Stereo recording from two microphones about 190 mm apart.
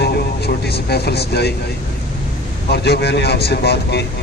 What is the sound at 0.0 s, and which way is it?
Vehicle, 55° left (ahead or behind).